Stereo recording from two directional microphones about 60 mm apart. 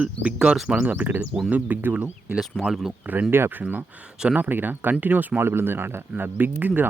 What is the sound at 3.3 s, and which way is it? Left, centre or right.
Speech, right.